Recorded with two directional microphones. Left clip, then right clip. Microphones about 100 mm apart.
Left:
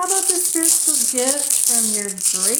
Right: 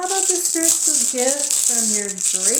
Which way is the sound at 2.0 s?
25° left (ahead or behind).